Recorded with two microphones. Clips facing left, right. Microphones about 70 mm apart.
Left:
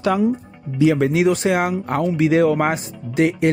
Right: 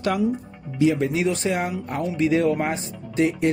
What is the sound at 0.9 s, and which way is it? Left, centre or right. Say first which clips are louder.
Speech: left 6 dB; left.